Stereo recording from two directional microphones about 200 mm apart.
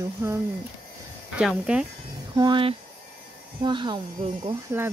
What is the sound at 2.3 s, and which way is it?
Speech, 25° right (ahead or behind).